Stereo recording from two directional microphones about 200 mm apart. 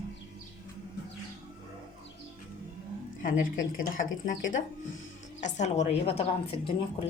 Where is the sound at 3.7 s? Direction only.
40° left (ahead or behind).